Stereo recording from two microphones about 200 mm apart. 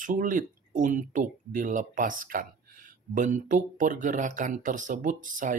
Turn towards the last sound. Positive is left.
turn(degrees=-40)  # may be behind; listen again after turning